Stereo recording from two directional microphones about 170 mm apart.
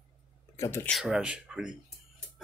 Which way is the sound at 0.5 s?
20° left (ahead or behind).